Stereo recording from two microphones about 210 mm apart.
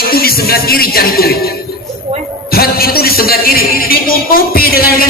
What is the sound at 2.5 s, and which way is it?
Speech, 45° left (ahead or behind).